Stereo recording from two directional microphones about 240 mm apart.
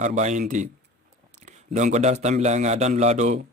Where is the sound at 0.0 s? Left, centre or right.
Right.